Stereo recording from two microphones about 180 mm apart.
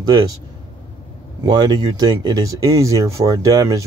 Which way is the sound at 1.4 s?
25° right (ahead or behind).